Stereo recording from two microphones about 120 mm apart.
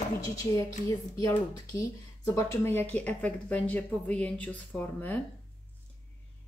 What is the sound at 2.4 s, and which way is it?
A woman's voice, 20° left (ahead or behind).